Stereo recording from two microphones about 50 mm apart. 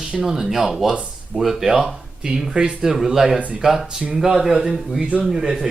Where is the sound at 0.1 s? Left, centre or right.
Centre.